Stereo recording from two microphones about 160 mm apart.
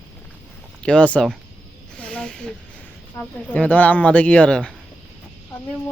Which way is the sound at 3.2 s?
10° left (ahead or behind).